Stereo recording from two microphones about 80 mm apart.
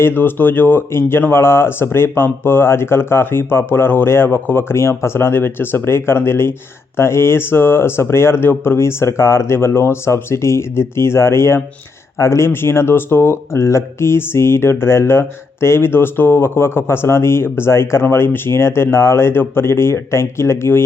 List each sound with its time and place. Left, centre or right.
0.0 s speech: left